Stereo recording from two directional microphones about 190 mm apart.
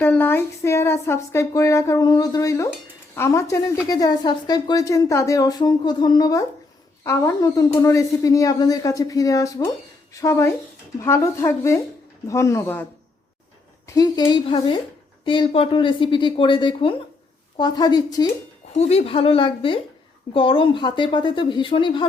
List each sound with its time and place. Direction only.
0.0 s a woman's voice: 10° left (ahead or behind)
13.8 s speech: 20° left (ahead or behind)
18.7 s speech: 35° left (ahead or behind)